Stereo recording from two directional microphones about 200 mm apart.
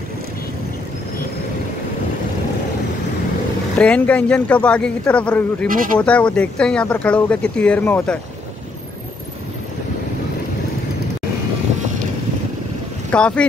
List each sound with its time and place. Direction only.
3.7 s speech: 5° left (ahead or behind)
13.1 s speech: 5° left (ahead or behind)